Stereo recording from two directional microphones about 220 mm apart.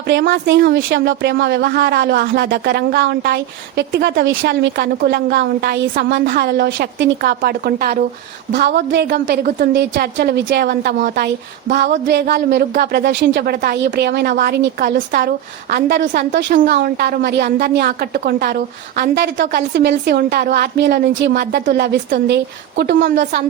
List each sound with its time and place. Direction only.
0.1 s a woman's voice: 55° right (ahead or behind)